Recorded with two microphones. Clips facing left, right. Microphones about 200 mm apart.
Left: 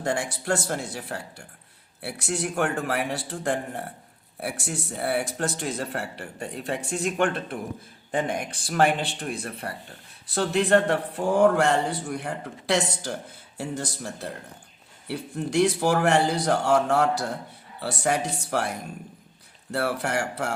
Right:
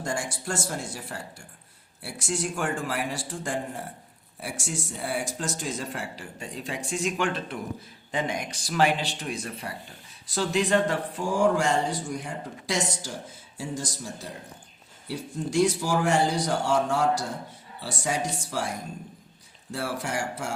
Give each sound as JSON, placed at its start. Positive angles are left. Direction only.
{"t": 0.0, "sound": "speech", "side_deg": 60}